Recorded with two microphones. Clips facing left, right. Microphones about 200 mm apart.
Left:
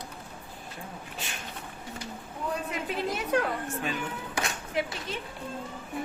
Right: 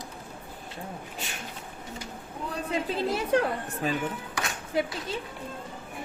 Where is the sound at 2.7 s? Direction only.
30° right (ahead or behind).